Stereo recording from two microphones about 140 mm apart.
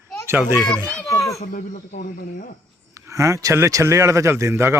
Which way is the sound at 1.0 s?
20° left (ahead or behind).